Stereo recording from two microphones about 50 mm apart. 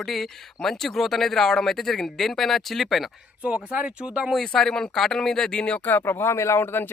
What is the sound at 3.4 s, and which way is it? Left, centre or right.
Speech, right.